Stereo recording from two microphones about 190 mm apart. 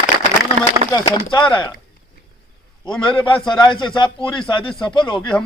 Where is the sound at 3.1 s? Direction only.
5° left (ahead or behind).